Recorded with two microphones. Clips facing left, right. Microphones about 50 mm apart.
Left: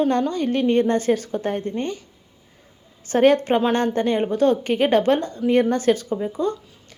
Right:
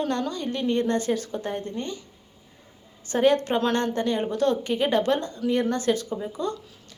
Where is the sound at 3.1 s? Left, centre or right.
Left.